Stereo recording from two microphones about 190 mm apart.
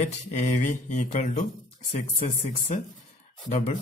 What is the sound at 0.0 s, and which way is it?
Speech, 35° left (ahead or behind).